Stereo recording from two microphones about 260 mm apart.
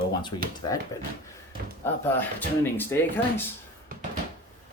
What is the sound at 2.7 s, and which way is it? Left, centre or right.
Speech, centre.